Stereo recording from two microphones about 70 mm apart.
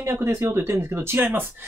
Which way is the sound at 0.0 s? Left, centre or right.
Right.